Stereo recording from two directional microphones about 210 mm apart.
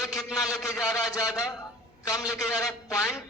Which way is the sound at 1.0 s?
15° left (ahead or behind).